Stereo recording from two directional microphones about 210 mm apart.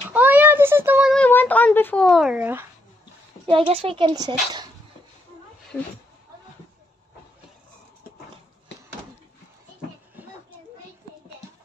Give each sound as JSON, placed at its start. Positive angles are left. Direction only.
{"t": 0.1, "sound": "child singing", "side_deg": -10}
{"t": 1.1, "sound": "a child's voice", "side_deg": 5}
{"t": 3.4, "sound": "speech", "side_deg": -25}
{"t": 5.7, "sound": "speech", "side_deg": 0}